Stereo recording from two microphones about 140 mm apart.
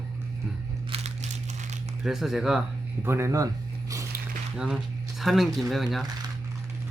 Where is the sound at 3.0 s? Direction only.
20° right (ahead or behind).